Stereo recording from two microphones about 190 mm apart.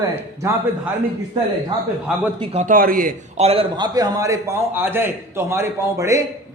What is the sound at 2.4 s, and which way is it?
A man's voice, 35° right (ahead or behind).